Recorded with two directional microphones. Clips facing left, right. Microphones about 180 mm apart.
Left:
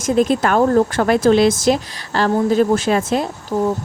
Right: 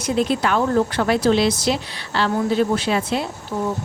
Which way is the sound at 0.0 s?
45° left (ahead or behind).